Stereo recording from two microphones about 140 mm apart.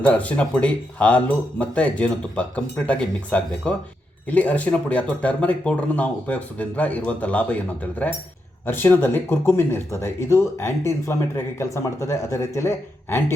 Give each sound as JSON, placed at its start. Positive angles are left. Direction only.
{"t": 0.0, "sound": "speech", "side_deg": 10}